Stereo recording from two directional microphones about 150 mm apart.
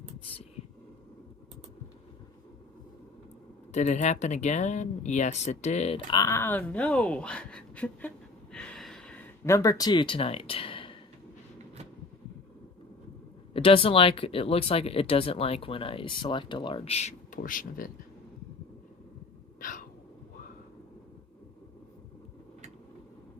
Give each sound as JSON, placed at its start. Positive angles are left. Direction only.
{"t": 3.7, "sound": "speech", "side_deg": 50}
{"t": 6.1, "sound": "speech", "side_deg": 25}
{"t": 8.5, "sound": "a sound", "side_deg": 5}
{"t": 9.4, "sound": "speech", "side_deg": 20}
{"t": 13.5, "sound": "speech", "side_deg": 40}
{"t": 19.5, "sound": "a sound", "side_deg": 65}